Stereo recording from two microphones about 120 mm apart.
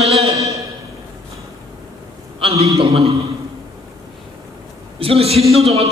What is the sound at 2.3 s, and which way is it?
Speech, 55° right (ahead or behind).